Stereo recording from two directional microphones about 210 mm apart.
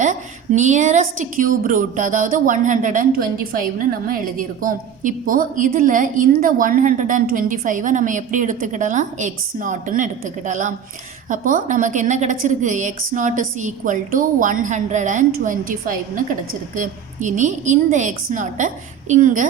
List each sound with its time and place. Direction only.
0.0 s a woman's voice: 35° right (ahead or behind)